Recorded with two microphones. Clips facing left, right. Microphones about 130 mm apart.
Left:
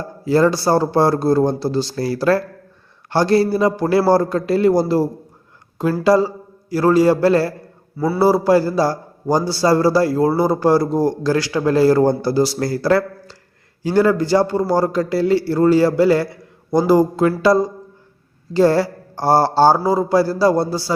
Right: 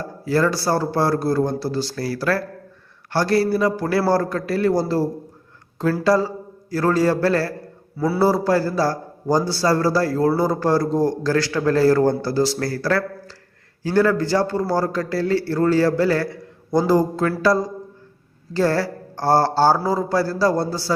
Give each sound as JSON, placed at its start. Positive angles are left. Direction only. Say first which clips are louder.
{"t": 0.3, "sound": "a man's voice", "louder": "left 5 dB", "side_deg": 20}
{"t": 7.9, "sound": "a man's voice", "louder": "left 2 dB", "side_deg": -5}
{"t": 8.2, "sound": "a man's voice", "louder": "left 5 dB", "side_deg": 10}